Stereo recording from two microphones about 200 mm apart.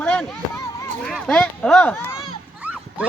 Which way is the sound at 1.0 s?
Centre (ahead or behind).